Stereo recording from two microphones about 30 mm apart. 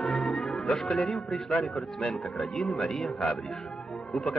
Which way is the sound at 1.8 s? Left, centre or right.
Left.